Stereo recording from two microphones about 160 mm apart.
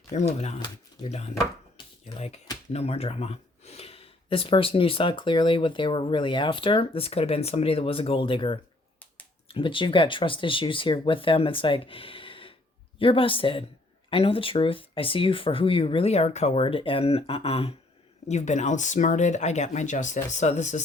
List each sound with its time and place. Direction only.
0.1 s speech: 45° left (ahead or behind)
1.7 s a sound: 40° left (ahead or behind)
2.7 s speech: 40° left (ahead or behind)